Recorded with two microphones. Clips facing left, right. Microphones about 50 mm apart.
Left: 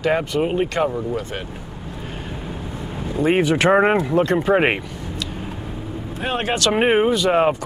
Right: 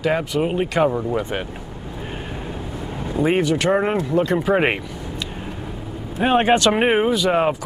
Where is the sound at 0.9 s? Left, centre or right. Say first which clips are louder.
Right 3 dB; centre.